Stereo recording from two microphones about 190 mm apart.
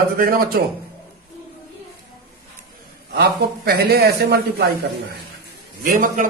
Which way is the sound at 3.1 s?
55° right (ahead or behind).